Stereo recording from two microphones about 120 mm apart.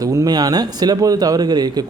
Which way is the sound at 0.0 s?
30° right (ahead or behind).